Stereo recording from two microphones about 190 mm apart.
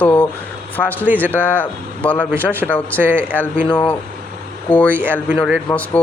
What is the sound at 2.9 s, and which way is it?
Speech, 10° right (ahead or behind).